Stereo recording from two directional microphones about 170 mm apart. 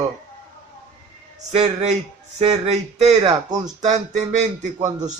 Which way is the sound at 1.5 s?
40° right (ahead or behind).